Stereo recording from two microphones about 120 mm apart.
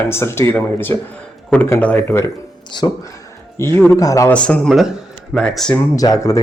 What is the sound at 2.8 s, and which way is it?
Speech, 35° left (ahead or behind).